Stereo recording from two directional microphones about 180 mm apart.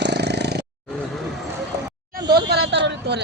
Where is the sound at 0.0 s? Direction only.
70° right (ahead or behind).